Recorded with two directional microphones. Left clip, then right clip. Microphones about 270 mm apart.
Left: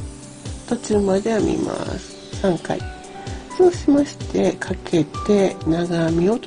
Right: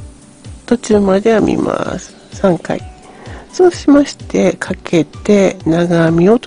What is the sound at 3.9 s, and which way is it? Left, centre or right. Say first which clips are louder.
Speech: right 7 dB; right.